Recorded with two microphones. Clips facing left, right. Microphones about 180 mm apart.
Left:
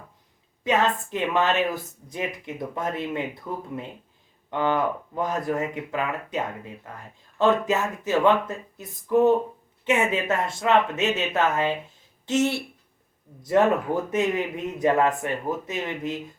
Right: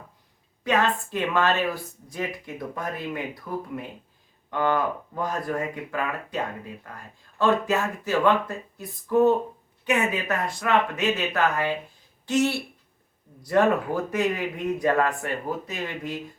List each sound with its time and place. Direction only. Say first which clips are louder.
0.6 s speech: left 1 dB; 20° left (ahead or behind)
4.5 s speech: left 1 dB; 20° left (ahead or behind)